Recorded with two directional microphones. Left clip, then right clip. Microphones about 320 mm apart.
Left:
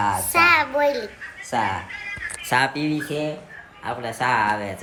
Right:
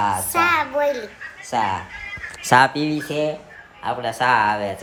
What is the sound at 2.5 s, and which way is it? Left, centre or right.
Speech, centre.